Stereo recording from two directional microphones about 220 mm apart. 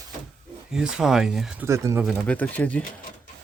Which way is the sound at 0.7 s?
5° right (ahead or behind).